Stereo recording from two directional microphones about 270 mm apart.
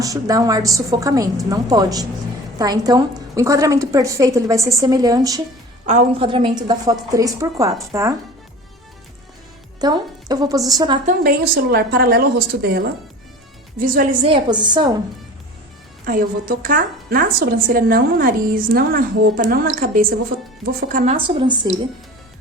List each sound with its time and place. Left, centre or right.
0.0 s a woman's voice: centre
5.8 s a woman's voice: right
9.8 s a woman's voice: centre
11.0 s a woman's voice: right
14.3 s a woman's voice: centre
16.0 s a woman's voice: right; by 21.8 s centre